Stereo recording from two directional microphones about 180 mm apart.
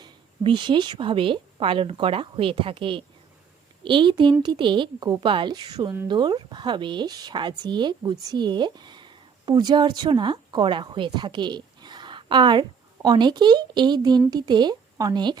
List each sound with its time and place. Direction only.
0.0 s a woman's voice: 25° right (ahead or behind)